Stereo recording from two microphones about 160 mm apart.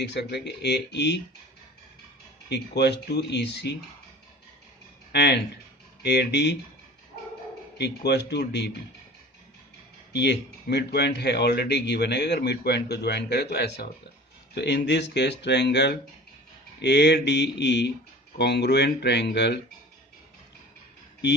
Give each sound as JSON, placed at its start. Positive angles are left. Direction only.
{"t": 0.0, "sound": "speech", "side_deg": 90}
{"t": 2.5, "sound": "speech", "side_deg": 90}
{"t": 5.1, "sound": "speech", "side_deg": 90}
{"t": 7.8, "sound": "speech", "side_deg": 90}
{"t": 10.1, "sound": "speech", "side_deg": 90}